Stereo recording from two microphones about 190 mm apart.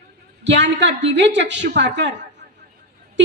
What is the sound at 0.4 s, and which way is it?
A woman's voice, 65° right (ahead or behind).